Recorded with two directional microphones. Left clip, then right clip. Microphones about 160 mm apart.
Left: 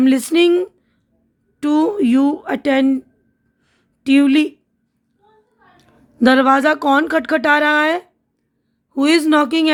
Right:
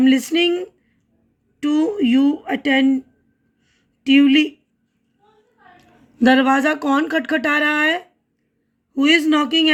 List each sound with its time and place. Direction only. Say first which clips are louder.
0.0 s speech: left 2 dB; 50° left (ahead or behind)
3.7 s a sound: even; 55° left (ahead or behind)
5.7 s speech: left 3 dB; 30° left (ahead or behind)
8.9 s speech: left 1 dB; 50° left (ahead or behind)